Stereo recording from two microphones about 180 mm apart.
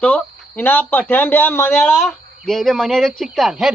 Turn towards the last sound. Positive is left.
turn(degrees=0)  # may be behind; listen again after turning